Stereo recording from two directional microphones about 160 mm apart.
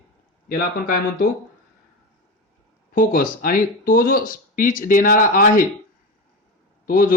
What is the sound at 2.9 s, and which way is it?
Speech, 60° left (ahead or behind).